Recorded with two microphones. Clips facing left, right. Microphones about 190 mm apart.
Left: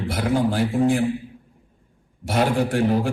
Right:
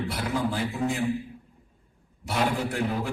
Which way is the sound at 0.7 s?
50° left (ahead or behind).